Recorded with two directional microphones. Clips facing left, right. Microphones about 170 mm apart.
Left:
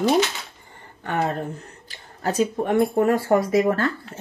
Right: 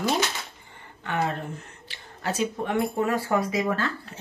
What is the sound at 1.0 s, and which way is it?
Speech, 45° left (ahead or behind).